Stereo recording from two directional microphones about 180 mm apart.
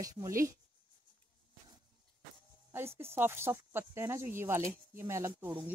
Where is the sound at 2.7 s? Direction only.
15° right (ahead or behind).